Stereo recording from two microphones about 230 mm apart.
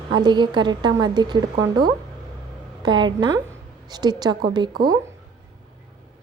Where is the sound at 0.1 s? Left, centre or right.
Centre.